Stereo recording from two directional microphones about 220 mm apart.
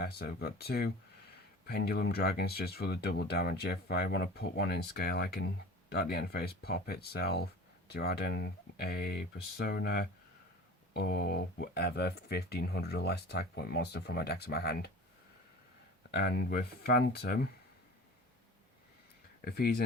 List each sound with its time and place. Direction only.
0.0 s speech: 45° left (ahead or behind)
16.1 s speech: 45° left (ahead or behind)
19.5 s speech: 45° left (ahead or behind)